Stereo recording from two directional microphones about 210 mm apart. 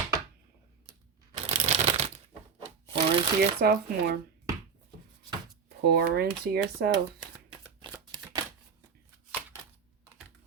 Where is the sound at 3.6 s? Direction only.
45° right (ahead or behind).